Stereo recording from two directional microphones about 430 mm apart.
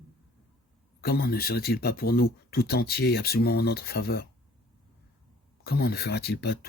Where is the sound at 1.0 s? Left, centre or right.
Left.